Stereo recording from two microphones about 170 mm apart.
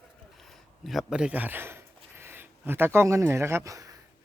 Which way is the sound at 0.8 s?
Centre (ahead or behind).